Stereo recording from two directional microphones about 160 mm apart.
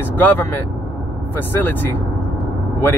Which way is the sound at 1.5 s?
10° left (ahead or behind).